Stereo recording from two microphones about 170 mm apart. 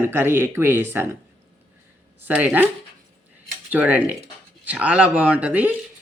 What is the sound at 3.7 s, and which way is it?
Speech, 10° right (ahead or behind).